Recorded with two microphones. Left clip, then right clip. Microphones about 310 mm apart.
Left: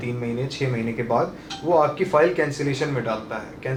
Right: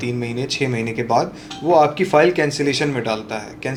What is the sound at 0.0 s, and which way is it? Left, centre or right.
Speech, right.